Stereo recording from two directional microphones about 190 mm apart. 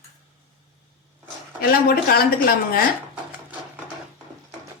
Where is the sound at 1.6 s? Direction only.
50° left (ahead or behind).